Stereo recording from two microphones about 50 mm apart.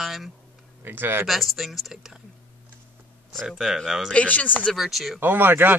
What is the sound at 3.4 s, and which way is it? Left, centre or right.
Speech, centre.